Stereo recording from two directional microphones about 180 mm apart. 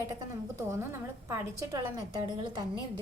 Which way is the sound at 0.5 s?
15° right (ahead or behind).